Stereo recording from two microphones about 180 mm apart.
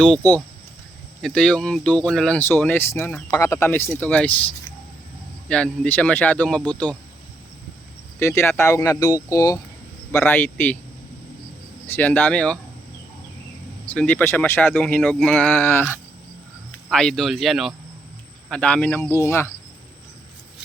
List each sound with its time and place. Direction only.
1.2 s speech: 5° left (ahead or behind)
5.5 s speech: 5° left (ahead or behind)
8.2 s speech: 15° left (ahead or behind)
11.9 s speech: 10° left (ahead or behind)
13.8 s speech: 10° left (ahead or behind)